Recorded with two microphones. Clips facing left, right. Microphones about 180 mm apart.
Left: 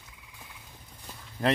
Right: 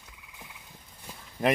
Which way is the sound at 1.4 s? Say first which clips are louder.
Right 1 dB; 15° right (ahead or behind).